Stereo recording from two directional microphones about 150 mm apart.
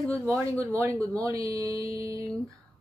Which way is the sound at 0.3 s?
15° right (ahead or behind).